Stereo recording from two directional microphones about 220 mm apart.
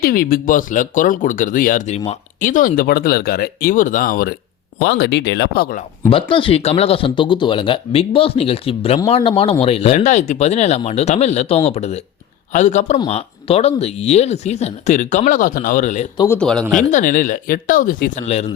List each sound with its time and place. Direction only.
0.0 s speech: 40° left (ahead or behind)
6.1 s speech: 25° left (ahead or behind)
16.1 s a man's voice: 10° left (ahead or behind)
16.9 s speech: 35° left (ahead or behind)